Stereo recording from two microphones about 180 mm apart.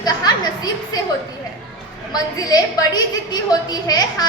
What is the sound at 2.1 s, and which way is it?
A woman's voice, 20° left (ahead or behind).